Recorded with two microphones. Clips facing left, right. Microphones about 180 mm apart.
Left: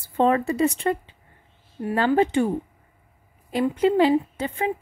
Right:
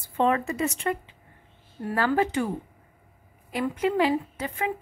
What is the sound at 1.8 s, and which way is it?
A woman's voice, 20° left (ahead or behind).